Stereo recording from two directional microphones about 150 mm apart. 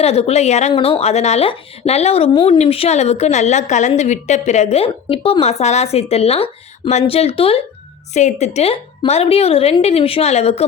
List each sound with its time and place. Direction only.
0.0 s a woman's voice: 45° left (ahead or behind)
0.7 s a woman's voice: 40° left (ahead or behind)
8.1 s a woman's voice: 50° left (ahead or behind)